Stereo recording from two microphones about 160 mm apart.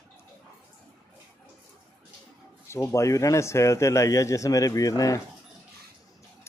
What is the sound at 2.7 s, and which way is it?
Speech, 20° left (ahead or behind).